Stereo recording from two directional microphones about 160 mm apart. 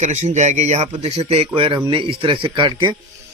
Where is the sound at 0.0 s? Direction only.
45° right (ahead or behind).